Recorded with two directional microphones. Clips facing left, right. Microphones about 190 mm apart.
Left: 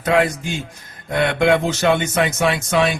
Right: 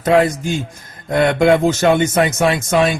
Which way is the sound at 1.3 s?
45° right (ahead or behind).